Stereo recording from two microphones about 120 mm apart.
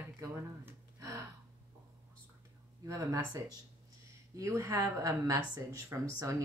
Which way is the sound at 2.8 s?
25° right (ahead or behind).